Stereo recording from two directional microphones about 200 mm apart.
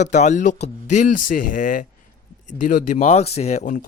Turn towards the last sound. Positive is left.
turn(degrees=40)  # may be behind; listen again after turning